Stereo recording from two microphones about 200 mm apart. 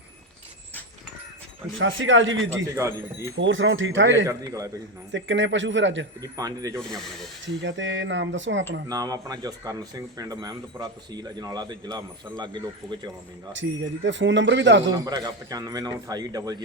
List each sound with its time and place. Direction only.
1.8 s speech: 70° right (ahead or behind)
2.7 s speech: 15° right (ahead or behind)
3.3 s speech: 70° right (ahead or behind)
4.3 s speech: 15° right (ahead or behind)
5.1 s speech: 65° right (ahead or behind)
6.3 s speech: 20° right (ahead or behind)
7.4 s speech: 65° right (ahead or behind)
8.9 s speech: 20° right (ahead or behind)
13.5 s speech: 65° right (ahead or behind)
14.9 s speech: 20° right (ahead or behind)